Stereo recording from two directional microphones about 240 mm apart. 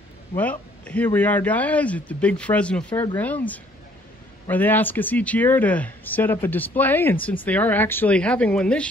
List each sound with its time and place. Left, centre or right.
0.4 s a man's voice: centre
2.9 s speech: centre
3.2 s a man's voice: centre